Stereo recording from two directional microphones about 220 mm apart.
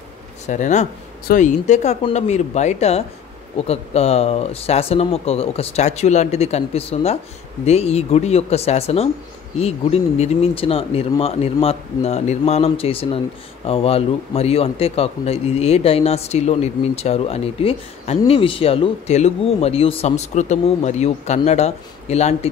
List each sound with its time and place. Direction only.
0.5 s a man's voice: 35° left (ahead or behind)